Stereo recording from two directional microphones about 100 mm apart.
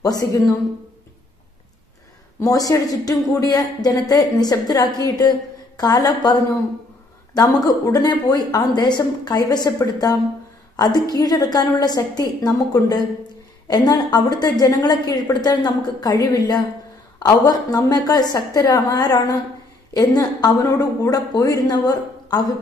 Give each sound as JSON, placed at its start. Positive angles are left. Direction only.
{"t": 0.0, "sound": "a woman's voice", "side_deg": 40}
{"t": 2.4, "sound": "a woman's voice", "side_deg": 35}